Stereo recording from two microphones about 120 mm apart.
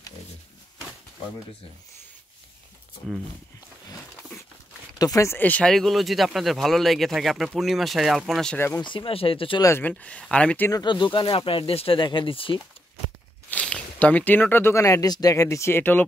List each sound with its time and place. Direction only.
3.0 s speech: 5° left (ahead or behind)
4.9 s speech: 30° left (ahead or behind)
5.4 s speech: 10° left (ahead or behind)
8.5 s speech: 20° left (ahead or behind)
8.8 s speech: 45° left (ahead or behind)
9.6 s speech: 20° left (ahead or behind)
10.7 s speech: 40° left (ahead or behind)
13.5 s speech: 10° left (ahead or behind)